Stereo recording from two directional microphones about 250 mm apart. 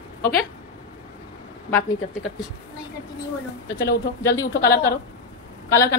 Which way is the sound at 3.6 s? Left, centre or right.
Left.